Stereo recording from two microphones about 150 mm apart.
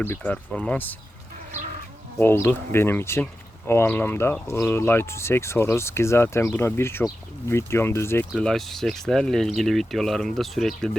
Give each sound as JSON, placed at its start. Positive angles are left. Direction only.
{"t": 0.0, "sound": "speech", "side_deg": 10}
{"t": 2.1, "sound": "speech", "side_deg": 15}
{"t": 8.3, "sound": "speech", "side_deg": 5}